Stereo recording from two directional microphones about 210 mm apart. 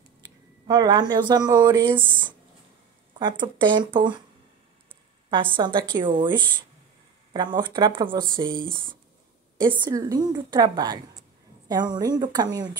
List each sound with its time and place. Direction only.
0.7 s speech: 20° right (ahead or behind)
3.2 s speech: 20° right (ahead or behind)
5.3 s speech: 25° right (ahead or behind)